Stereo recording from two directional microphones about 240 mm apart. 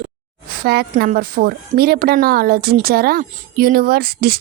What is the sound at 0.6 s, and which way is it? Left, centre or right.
A woman's voice, right.